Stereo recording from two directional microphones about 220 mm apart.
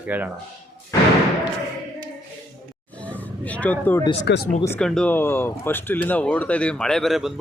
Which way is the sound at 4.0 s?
25° left (ahead or behind).